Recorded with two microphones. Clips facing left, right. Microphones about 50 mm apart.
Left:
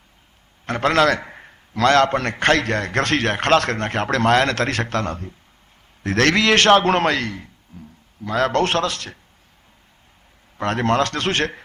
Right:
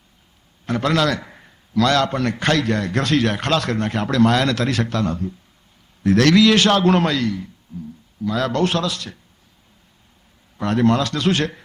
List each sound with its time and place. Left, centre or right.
0.6 s a man's voice: left
10.6 s a man's voice: left